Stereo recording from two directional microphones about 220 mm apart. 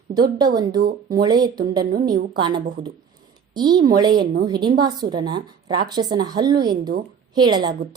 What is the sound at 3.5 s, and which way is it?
A woman's voice, 20° right (ahead or behind).